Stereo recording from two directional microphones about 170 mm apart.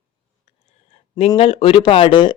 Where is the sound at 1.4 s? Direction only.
35° left (ahead or behind).